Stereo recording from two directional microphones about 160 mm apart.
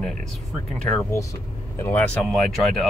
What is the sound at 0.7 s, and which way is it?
Speech, 5° left (ahead or behind).